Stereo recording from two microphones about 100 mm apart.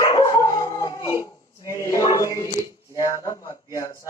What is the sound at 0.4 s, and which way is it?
Dog, 35° left (ahead or behind).